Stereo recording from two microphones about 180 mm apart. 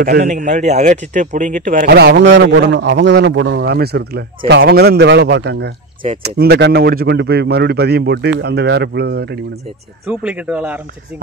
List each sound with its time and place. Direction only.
0.0 s a man's voice: 65° right (ahead or behind)
0.3 s speech: 40° right (ahead or behind)
2.0 s a man's voice: 70° right (ahead or behind)
6.2 s a man's voice: 60° right (ahead or behind)
10.0 s speech: 5° right (ahead or behind)